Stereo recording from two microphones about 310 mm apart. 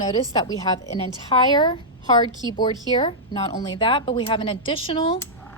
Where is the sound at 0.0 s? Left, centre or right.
Centre.